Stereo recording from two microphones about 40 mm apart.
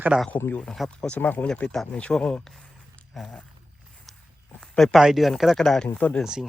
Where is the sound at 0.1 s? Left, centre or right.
Right.